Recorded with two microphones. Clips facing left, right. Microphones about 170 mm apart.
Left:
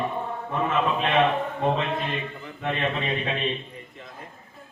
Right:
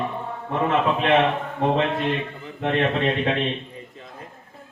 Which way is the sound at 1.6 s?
75° right (ahead or behind).